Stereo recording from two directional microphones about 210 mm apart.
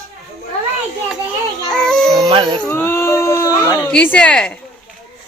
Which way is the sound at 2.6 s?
10° left (ahead or behind).